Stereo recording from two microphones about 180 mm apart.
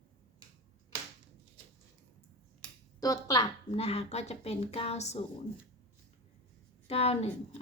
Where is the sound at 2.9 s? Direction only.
20° left (ahead or behind).